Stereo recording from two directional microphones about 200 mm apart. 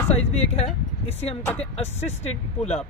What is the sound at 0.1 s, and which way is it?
Speech, 30° left (ahead or behind).